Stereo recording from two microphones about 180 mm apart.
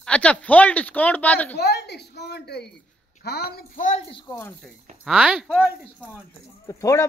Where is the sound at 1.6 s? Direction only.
65° left (ahead or behind); by 4.0 s 45° left (ahead or behind).